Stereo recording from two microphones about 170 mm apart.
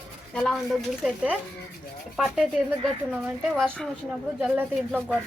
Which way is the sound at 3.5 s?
Centre (ahead or behind).